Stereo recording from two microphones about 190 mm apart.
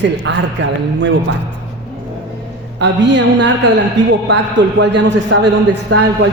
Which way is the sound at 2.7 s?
65° right (ahead or behind).